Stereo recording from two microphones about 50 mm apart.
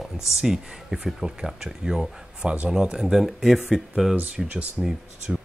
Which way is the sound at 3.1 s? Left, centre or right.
Centre.